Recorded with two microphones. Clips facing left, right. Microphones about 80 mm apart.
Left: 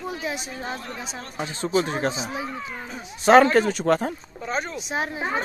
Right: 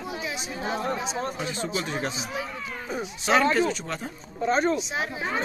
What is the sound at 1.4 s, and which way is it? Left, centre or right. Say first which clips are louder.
Speech: left 5 dB; left.